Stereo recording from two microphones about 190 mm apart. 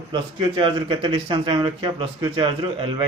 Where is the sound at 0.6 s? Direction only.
25° right (ahead or behind).